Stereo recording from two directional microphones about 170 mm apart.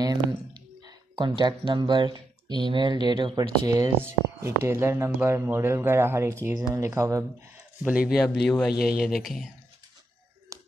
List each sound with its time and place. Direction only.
0.0 s a sound: 20° right (ahead or behind)
1.4 s speech: 25° right (ahead or behind)
8.1 s speech: 5° left (ahead or behind)